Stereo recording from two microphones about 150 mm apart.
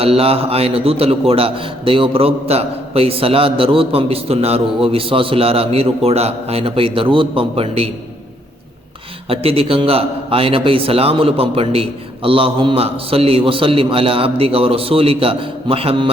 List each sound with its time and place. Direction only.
0.0 s a man's voice: 40° right (ahead or behind)
9.3 s a man's voice: 40° right (ahead or behind)